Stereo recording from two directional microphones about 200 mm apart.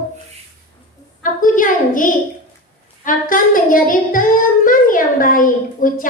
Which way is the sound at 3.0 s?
40° left (ahead or behind).